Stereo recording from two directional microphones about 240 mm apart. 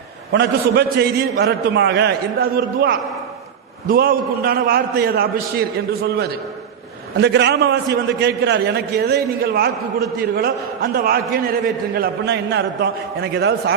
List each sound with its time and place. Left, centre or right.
0.3 s a man's voice: right